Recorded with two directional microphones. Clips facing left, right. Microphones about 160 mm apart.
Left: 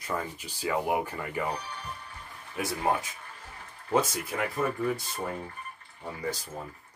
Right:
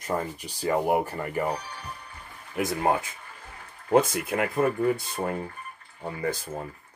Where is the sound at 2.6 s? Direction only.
50° right (ahead or behind).